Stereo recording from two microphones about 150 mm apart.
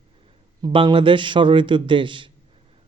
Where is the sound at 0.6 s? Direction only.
35° right (ahead or behind).